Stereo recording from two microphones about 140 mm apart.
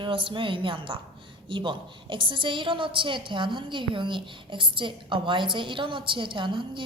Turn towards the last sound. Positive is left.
turn(degrees=-35)  # may be behind; listen again after turning